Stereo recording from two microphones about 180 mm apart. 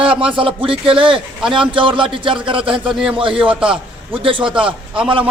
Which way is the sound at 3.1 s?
30° right (ahead or behind).